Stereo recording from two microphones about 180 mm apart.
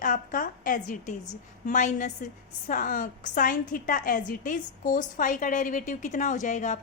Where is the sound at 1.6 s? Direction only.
45° left (ahead or behind).